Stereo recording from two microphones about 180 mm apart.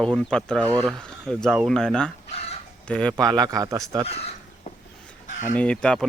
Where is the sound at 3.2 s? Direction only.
20° right (ahead or behind).